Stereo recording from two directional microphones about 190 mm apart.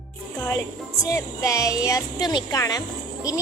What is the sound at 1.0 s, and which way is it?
Speech, 15° left (ahead or behind).